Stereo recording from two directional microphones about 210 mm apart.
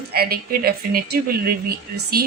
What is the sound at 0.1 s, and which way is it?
A woman's voice, 45° right (ahead or behind).